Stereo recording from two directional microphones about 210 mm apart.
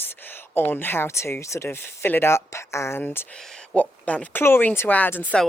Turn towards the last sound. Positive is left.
turn(degrees=10)  # may be behind; listen again after turning